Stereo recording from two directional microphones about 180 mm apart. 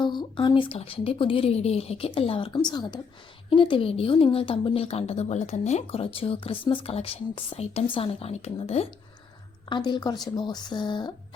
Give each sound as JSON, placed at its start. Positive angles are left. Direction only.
{"t": 0.0, "sound": "a woman's voice", "side_deg": 25}